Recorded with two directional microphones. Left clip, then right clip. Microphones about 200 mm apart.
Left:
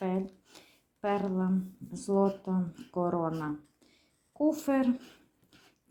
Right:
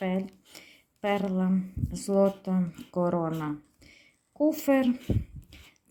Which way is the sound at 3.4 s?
30° right (ahead or behind).